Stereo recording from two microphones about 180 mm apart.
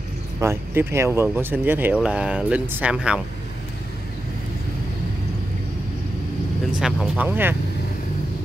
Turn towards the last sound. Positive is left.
turn(degrees=-10)  # may be behind; listen again after turning